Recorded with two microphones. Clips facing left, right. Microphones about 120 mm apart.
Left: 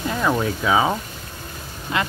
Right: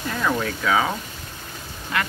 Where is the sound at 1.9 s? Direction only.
20° left (ahead or behind).